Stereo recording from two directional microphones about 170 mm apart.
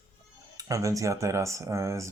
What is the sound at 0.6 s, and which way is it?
Speech, 20° right (ahead or behind).